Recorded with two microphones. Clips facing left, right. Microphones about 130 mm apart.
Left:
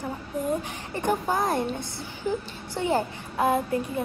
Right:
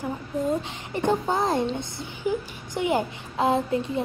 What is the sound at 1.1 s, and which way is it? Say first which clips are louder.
A woman's voice: right 1 dB; 25° right (ahead or behind).